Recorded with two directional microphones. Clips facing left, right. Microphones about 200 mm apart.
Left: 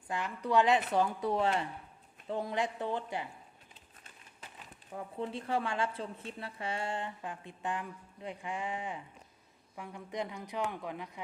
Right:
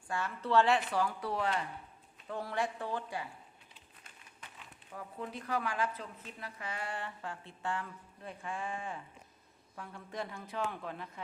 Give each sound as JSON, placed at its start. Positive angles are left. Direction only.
{"t": 0.1, "sound": "speech", "side_deg": 15}
{"t": 4.9, "sound": "speech", "side_deg": 25}